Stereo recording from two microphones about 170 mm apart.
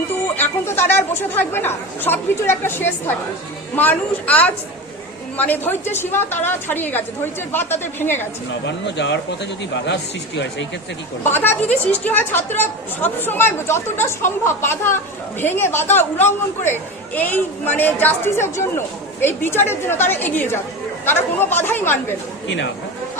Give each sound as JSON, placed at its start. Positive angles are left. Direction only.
{"t": 0.3, "sound": "a woman's voice", "side_deg": 10}
{"t": 8.6, "sound": "speech", "side_deg": 90}
{"t": 11.2, "sound": "a woman's voice", "side_deg": 10}
{"t": 22.4, "sound": "speech", "side_deg": 90}